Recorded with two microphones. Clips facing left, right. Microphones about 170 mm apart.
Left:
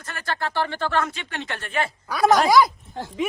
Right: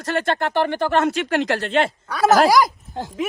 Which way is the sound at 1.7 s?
25° right (ahead or behind).